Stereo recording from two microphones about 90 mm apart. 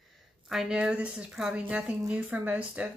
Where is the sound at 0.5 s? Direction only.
5° right (ahead or behind).